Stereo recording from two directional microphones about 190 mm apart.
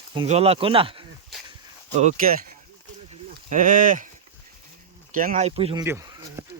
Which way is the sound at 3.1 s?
40° right (ahead or behind).